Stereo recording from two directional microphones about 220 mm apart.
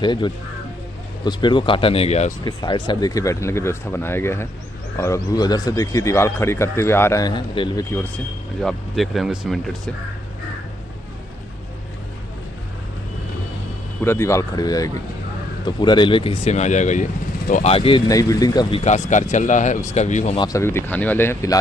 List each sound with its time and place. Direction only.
0.0 s speech: 20° left (ahead or behind)
8.5 s speech: centre (ahead or behind)
14.0 s speech: 10° left (ahead or behind)
18.9 s speech: 35° left (ahead or behind)
20.3 s speech: 15° left (ahead or behind)